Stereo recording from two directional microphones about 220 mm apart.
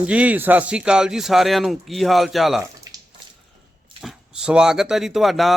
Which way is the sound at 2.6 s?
15° right (ahead or behind).